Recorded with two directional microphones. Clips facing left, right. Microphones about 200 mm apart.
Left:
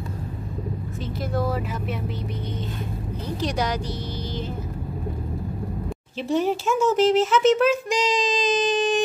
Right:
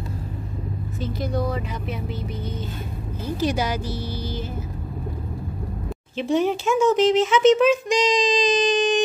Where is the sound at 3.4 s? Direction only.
5° right (ahead or behind).